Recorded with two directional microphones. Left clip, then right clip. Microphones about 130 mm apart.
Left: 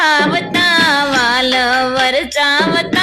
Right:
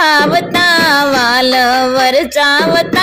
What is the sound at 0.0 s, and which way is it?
Music, 35° right (ahead or behind).